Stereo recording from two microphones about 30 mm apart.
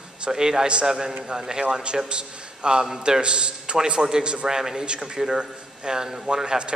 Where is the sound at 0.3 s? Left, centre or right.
Right.